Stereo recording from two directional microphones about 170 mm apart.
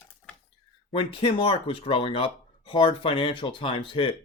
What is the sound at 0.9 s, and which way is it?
Speech, 30° left (ahead or behind).